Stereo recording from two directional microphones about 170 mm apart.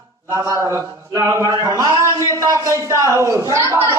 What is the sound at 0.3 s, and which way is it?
A man's voice, 15° right (ahead or behind).